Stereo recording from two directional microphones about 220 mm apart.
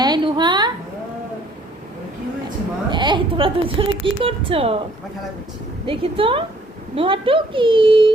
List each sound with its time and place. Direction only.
0.0 s a sound: 20° right (ahead or behind)
2.9 s a woman's voice: 20° right (ahead or behind)
5.8 s a woman's voice: 25° right (ahead or behind)